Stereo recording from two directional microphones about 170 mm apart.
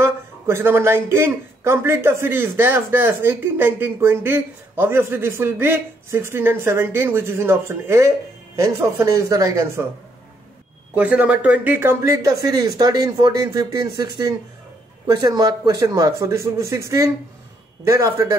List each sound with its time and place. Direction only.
0.0 s speech: 15° right (ahead or behind)
11.0 s speech: 10° right (ahead or behind)